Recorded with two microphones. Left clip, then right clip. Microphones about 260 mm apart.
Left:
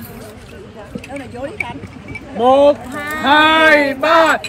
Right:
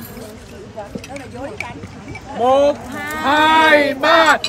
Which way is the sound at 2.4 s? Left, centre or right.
Left.